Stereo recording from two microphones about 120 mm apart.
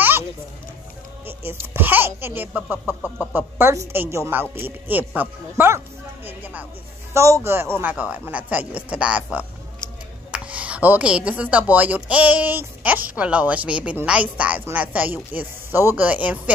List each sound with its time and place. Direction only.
1.2 s speech: 20° right (ahead or behind)
2.9 s a sound: 20° left (ahead or behind)
3.3 s speech: 20° right (ahead or behind)
7.2 s speech: 25° right (ahead or behind)